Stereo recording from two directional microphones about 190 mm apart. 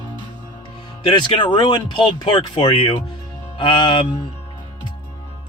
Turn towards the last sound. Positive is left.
turn(degrees=25)  # may be behind; listen again after turning